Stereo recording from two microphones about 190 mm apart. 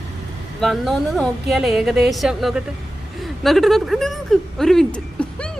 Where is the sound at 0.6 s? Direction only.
Centre (ahead or behind).